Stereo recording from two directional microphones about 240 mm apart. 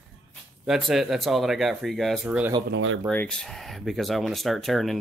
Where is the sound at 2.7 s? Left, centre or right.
Right.